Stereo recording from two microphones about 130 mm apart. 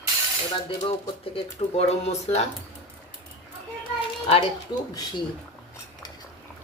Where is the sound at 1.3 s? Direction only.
55° left (ahead or behind).